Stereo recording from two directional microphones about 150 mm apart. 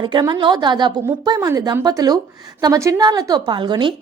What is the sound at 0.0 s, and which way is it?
A woman's voice, 30° right (ahead or behind).